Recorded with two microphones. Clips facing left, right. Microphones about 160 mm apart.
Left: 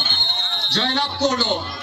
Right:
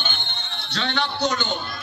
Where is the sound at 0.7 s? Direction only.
35° left (ahead or behind).